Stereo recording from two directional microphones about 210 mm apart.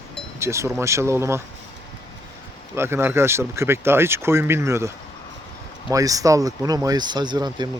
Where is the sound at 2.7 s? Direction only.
10° right (ahead or behind).